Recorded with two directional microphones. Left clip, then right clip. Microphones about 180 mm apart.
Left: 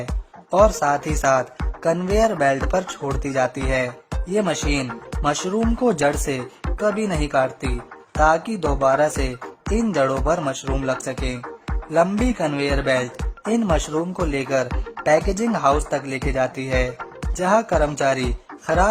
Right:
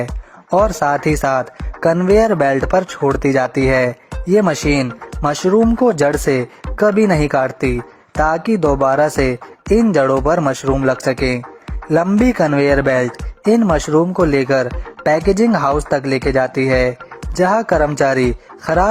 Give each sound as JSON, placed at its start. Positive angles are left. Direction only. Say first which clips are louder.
{"t": 0.6, "sound": "speech", "louder": "even", "side_deg": -35}